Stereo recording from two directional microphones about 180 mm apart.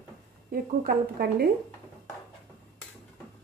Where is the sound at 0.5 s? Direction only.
55° right (ahead or behind).